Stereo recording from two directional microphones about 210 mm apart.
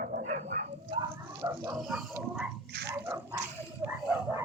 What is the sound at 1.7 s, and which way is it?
Speech, centre (ahead or behind).